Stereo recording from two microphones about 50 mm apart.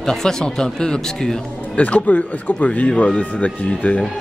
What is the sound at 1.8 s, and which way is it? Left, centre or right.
A man's voice, left.